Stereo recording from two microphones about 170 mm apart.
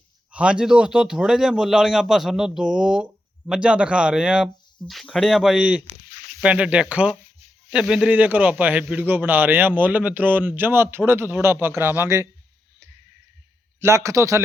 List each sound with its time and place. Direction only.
0.3 s a man's voice: 5° right (ahead or behind)
13.7 s speech: 15° right (ahead or behind)